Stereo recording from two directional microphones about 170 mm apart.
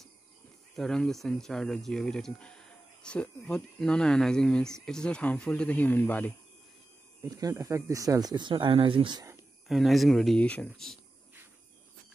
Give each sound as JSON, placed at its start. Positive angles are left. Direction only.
{"t": 0.7, "sound": "speech", "side_deg": 5}
{"t": 7.2, "sound": "speech", "side_deg": -20}
{"t": 9.7, "sound": "speech", "side_deg": 0}